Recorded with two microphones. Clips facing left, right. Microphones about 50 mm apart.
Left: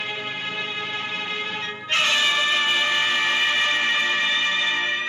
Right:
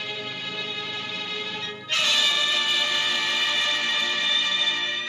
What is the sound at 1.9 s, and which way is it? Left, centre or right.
Music, left.